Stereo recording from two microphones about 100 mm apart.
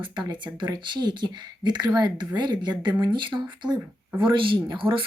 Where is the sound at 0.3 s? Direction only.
50° right (ahead or behind).